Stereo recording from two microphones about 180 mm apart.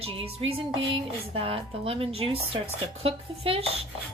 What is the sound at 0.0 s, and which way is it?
Speech, 30° right (ahead or behind).